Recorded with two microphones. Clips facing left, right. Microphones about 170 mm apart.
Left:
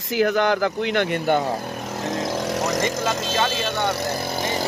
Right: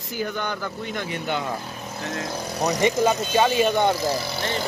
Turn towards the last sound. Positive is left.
turn(degrees=55)  # may be behind; listen again after turning